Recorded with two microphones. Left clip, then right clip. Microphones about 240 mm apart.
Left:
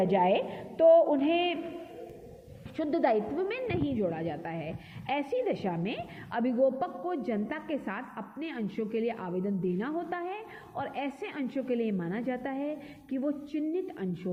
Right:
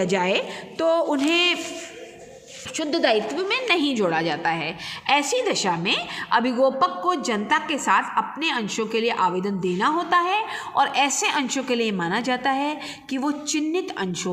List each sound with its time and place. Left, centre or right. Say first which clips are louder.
0.0 s a woman's voice: right 4 dB; right
2.7 s a woman's voice: right 6 dB; centre